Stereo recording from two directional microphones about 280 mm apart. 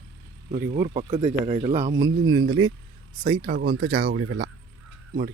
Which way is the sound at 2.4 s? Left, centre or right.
Right.